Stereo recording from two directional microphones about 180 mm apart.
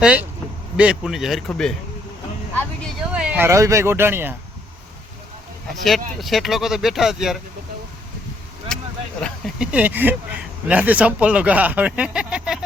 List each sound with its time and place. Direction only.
0.0 s speech: 5° right (ahead or behind)
3.1 s speech: 5° right (ahead or behind)
5.8 s speech: centre (ahead or behind)
8.7 s vehicle: 5° left (ahead or behind)
9.2 s a sound: 5° right (ahead or behind)
10.7 s speech: 10° right (ahead or behind)